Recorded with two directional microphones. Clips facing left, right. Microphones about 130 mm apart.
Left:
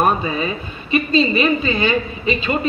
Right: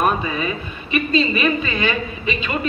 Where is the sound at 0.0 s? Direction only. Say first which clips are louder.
Left 2 dB; 30° left (ahead or behind).